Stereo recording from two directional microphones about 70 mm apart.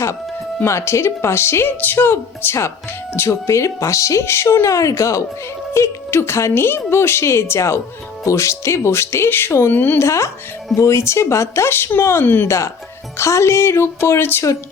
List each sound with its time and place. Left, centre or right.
0.6 s a woman's voice: left
10.0 s a woman's voice: left
12.5 s a woman's voice: left